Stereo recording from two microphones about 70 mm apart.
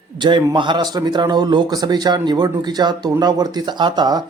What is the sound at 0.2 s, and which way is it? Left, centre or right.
A man's voice, right.